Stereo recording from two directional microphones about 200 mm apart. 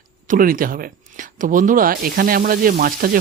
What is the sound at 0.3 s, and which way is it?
Speech, 45° right (ahead or behind).